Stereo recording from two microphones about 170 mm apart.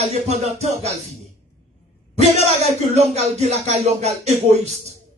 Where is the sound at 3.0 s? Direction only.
40° right (ahead or behind).